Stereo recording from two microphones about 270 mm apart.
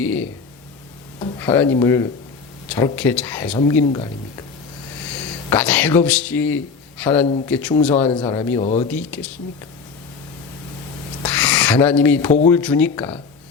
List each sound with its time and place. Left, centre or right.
1.2 s speech: centre
5.5 s speech: centre
8.1 s speech: centre
8.9 s speech: centre
11.3 s a sound: centre
12.5 s speech: centre